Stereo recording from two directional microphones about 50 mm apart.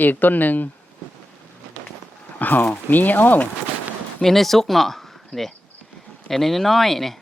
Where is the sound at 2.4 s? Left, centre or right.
Left.